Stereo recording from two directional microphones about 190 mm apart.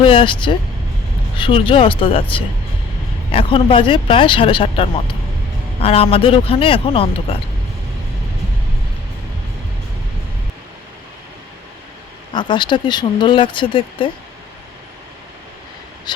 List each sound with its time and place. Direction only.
0.0 s speech: 25° left (ahead or behind)
3.3 s speech: 30° left (ahead or behind)
12.3 s speech: 25° left (ahead or behind)
16.1 s a sound: 25° left (ahead or behind)